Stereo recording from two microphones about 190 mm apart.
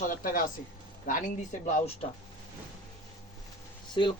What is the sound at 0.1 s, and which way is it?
Speech, 45° left (ahead or behind).